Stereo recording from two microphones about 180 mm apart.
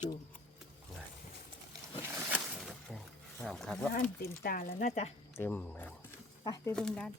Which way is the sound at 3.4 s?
5° left (ahead or behind).